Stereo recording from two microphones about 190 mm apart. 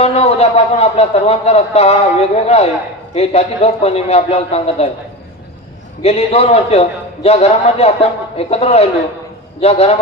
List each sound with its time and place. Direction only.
0.0 s speech: 35° left (ahead or behind)
6.0 s speech: 35° left (ahead or behind)